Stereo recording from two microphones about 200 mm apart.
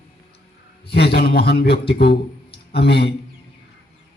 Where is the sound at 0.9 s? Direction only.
55° left (ahead or behind).